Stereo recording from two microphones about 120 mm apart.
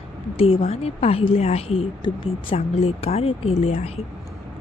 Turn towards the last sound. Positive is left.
turn(degrees=70)  # may be behind; listen again after turning